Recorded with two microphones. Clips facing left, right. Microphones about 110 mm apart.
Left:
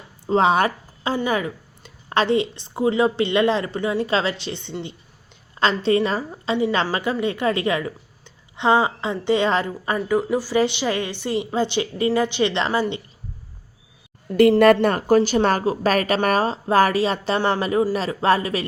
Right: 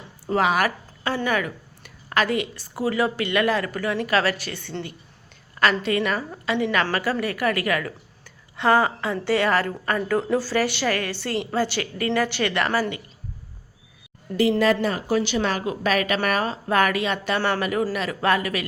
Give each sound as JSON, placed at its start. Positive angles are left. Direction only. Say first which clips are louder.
{"t": 0.3, "sound": "a woman's voice", "louder": "left 3 dB", "side_deg": 25}
{"t": 14.6, "sound": "a woman's voice", "louder": "left 6 dB", "side_deg": 55}